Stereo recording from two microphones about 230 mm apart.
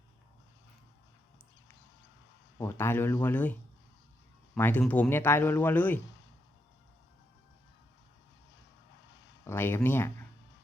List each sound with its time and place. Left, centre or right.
2.6 s speech: centre
9.4 s speech: centre